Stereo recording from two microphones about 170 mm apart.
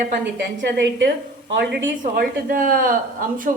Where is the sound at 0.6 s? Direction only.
90° right.